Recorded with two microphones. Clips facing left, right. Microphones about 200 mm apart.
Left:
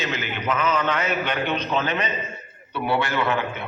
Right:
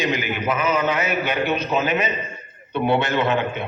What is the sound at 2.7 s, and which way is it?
Speech, 20° right (ahead or behind).